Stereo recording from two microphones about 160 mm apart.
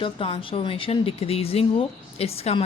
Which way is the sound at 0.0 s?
35° left (ahead or behind).